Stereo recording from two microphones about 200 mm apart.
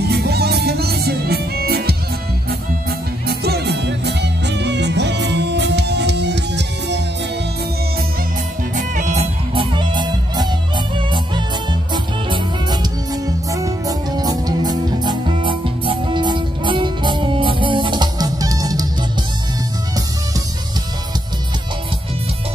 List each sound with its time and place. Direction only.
0.0 s music: 55° right (ahead or behind)
3.3 s music: 55° right (ahead or behind)
8.7 s music: 40° right (ahead or behind); by 18.9 s 20° right (ahead or behind)